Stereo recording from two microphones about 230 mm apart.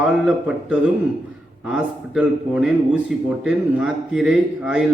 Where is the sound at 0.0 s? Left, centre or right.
Centre.